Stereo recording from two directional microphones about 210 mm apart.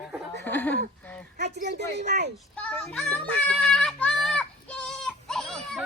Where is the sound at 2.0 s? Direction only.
50° right (ahead or behind).